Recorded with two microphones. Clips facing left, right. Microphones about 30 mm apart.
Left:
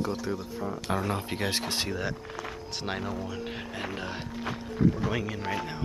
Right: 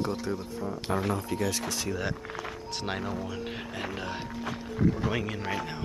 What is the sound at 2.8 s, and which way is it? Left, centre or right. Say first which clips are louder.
Speech: even; centre.